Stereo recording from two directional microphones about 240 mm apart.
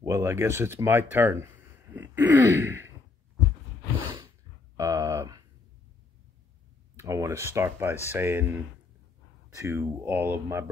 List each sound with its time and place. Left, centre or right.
0.0 s speech: centre
2.0 s throat clearing: centre
4.7 s a sound: centre
7.0 s speech: centre
9.6 s speech: centre